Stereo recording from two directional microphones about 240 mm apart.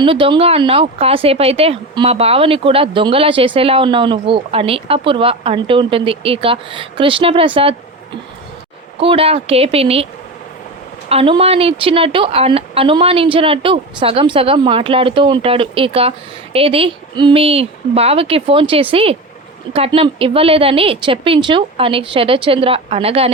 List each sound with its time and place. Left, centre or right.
0.0 s a woman's voice: right
9.0 s a woman's voice: right
11.1 s a woman's voice: right